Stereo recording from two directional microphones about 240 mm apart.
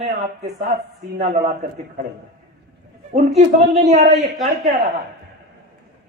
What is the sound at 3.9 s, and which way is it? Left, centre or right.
Speech, right.